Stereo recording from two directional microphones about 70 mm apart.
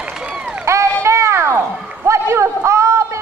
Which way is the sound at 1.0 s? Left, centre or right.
Right.